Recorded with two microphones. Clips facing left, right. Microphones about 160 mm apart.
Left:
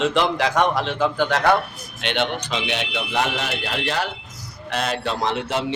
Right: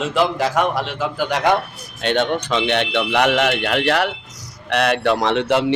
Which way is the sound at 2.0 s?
45° right (ahead or behind).